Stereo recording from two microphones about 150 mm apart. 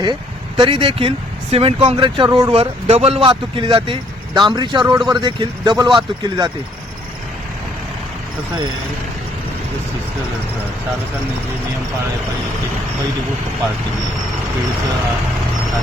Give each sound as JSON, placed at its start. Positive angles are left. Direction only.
{"t": 0.0, "sound": "speech", "side_deg": -30}